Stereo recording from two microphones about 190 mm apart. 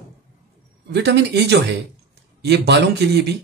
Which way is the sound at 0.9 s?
65° right (ahead or behind).